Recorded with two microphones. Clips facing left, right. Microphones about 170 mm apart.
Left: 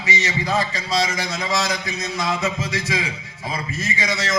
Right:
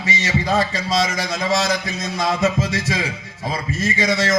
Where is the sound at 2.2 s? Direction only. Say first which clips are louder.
Right 6 dB; 50° right (ahead or behind).